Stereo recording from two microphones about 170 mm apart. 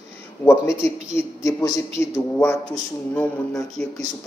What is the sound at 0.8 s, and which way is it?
A woman's voice, 15° left (ahead or behind).